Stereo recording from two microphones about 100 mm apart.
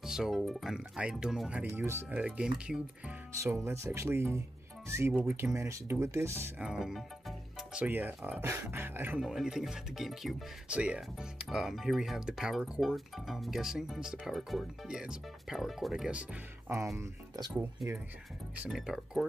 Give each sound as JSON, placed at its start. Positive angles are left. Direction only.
{"t": 0.0, "sound": "music", "side_deg": -5}
{"t": 0.4, "sound": "speech", "side_deg": 0}
{"t": 1.7, "sound": "speech", "side_deg": -25}
{"t": 2.1, "sound": "speech", "side_deg": -10}
{"t": 3.5, "sound": "speech", "side_deg": -30}
{"t": 6.6, "sound": "music", "side_deg": -5}
{"t": 7.8, "sound": "speech", "side_deg": -15}
{"t": 9.2, "sound": "speech", "side_deg": -5}
{"t": 16.9, "sound": "speech", "side_deg": -30}
{"t": 18.7, "sound": "speech", "side_deg": 0}